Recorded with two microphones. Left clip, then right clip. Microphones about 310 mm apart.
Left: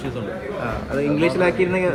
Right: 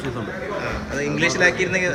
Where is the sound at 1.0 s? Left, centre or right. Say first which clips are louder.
Right 1 dB; centre.